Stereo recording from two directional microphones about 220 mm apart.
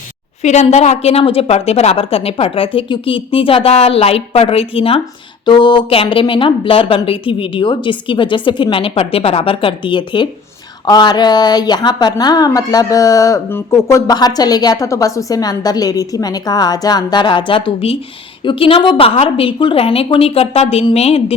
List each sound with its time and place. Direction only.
0.4 s a woman's voice: 30° left (ahead or behind)